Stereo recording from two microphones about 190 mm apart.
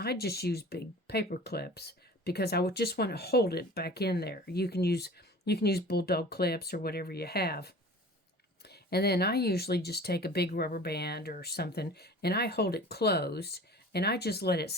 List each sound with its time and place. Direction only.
0.0 s speech: 55° left (ahead or behind)